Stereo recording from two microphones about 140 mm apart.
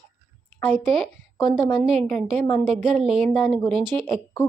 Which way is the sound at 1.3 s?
20° left (ahead or behind).